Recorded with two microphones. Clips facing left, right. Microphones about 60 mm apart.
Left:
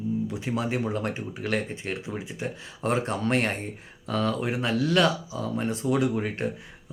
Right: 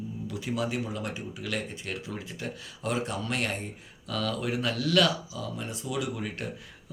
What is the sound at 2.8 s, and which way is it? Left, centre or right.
Speech, left.